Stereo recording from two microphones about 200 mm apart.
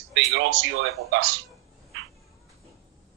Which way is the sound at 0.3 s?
65° right (ahead or behind).